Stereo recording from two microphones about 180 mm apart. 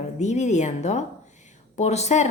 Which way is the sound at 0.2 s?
40° left (ahead or behind).